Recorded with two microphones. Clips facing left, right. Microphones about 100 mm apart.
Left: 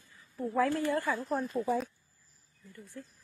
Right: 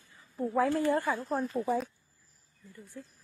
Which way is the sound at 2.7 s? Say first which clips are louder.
Even; 15° right (ahead or behind).